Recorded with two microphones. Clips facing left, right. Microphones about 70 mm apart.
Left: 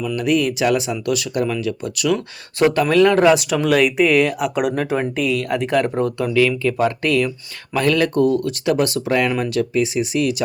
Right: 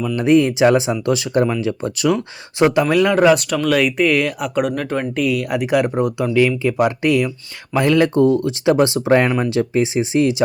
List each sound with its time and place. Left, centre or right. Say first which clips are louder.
0.2 s speech: right 6 dB; right
2.1 s speech: right 2 dB; centre